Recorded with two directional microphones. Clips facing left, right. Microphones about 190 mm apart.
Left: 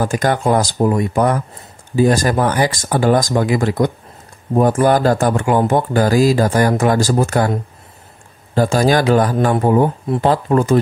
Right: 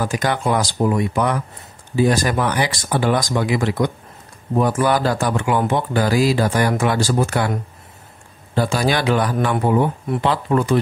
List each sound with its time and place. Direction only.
0.0 s speech: 45° left (ahead or behind)
8.5 s speech: 45° left (ahead or behind)